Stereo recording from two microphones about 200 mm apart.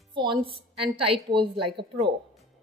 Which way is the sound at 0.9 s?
25° right (ahead or behind).